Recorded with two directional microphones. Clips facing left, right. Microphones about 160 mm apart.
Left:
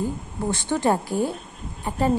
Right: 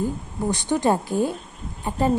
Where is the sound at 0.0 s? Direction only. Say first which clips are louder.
Right 1 dB; 15° right (ahead or behind).